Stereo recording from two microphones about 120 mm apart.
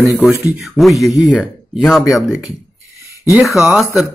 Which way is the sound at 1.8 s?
10° left (ahead or behind).